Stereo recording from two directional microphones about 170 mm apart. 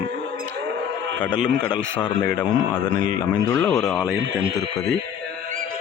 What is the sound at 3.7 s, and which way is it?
Speech, centre (ahead or behind).